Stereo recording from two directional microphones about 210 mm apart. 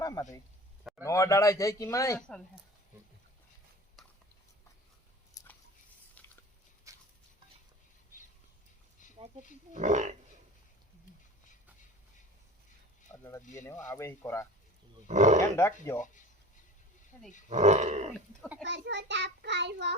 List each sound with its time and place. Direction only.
0.0 s a sound: 15° left (ahead or behind)
1.0 s speech: 15° left (ahead or behind)
4.0 s a sound: centre (ahead or behind)
5.4 s chewing: 15° left (ahead or behind)
6.2 s biting: 5° left (ahead or behind)
6.9 s dog: 15° right (ahead or behind)
8.1 s a sound: 35° left (ahead or behind)
9.7 s speech: 35° right (ahead or behind)
13.1 s a sound: 10° left (ahead or behind)
13.6 s speech: 10° left (ahead or behind)
15.0 s speech: 35° right (ahead or behind)
15.5 s speech: 15° left (ahead or behind)
17.5 s speech: 35° right (ahead or behind)
18.6 s a child's voice: 55° right (ahead or behind)